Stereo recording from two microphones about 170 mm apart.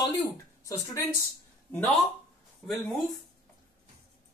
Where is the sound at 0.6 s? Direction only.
20° left (ahead or behind).